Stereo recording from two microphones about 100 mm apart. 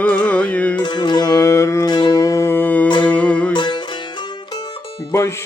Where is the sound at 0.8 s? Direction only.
50° left (ahead or behind); by 1.8 s 30° left (ahead or behind).